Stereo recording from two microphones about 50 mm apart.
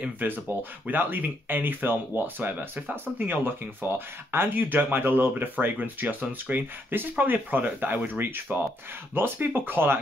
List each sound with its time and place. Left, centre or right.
0.0 s speech: right